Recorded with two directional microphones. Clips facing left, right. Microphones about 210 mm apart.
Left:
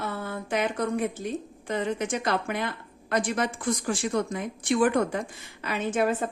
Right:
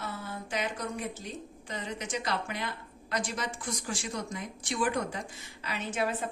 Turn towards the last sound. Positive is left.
turn(degrees=50)  # may be behind; listen again after turning